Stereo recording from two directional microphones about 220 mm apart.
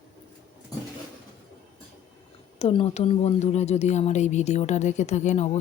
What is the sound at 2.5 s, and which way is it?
Speech, 25° left (ahead or behind).